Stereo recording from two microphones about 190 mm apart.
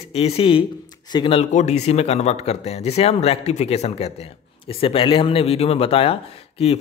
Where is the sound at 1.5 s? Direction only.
35° left (ahead or behind).